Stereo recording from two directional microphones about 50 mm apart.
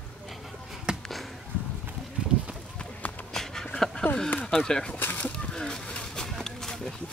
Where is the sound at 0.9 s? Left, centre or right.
Centre.